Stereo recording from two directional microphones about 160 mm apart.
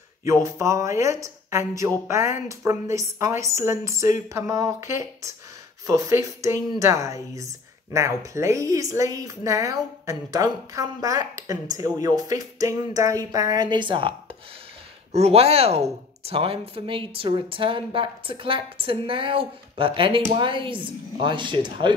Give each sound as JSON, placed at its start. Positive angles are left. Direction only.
{"t": 0.2, "sound": "speech", "side_deg": -20}
{"t": 15.1, "sound": "a woman's voice", "side_deg": -40}